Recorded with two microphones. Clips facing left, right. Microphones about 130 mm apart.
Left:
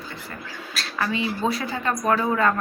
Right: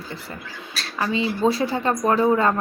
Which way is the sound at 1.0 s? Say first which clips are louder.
Right 4 dB; 30° right (ahead or behind).